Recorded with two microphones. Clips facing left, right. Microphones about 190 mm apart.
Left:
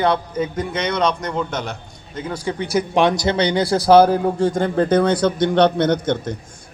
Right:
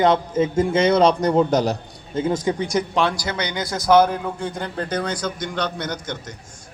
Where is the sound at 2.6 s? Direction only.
10° left (ahead or behind).